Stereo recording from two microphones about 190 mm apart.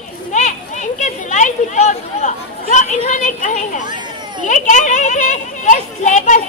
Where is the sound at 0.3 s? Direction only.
40° left (ahead or behind).